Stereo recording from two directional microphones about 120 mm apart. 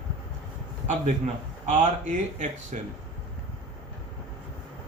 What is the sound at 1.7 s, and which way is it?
Speech, 90° right.